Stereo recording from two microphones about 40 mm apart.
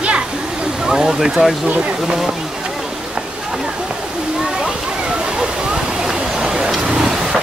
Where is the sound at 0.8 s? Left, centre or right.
Centre.